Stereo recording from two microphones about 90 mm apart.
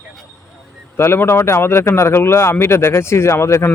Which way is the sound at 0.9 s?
25° left (ahead or behind).